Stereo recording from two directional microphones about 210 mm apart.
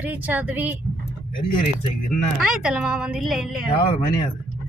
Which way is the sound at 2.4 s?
5° right (ahead or behind).